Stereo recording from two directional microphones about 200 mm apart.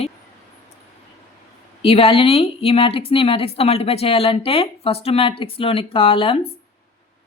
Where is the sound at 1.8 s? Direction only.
30° left (ahead or behind).